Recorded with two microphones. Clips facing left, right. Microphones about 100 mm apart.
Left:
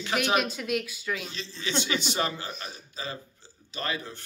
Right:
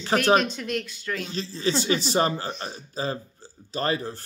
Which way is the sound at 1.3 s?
40° right (ahead or behind).